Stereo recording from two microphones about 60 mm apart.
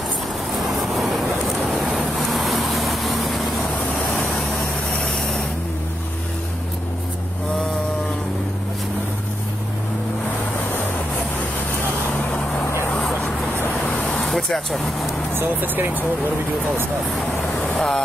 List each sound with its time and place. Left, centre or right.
0.7 s vehicle: centre
4.9 s vehicle: centre
12.9 s vehicle: centre
15.3 s speech: right
17.7 s speech: centre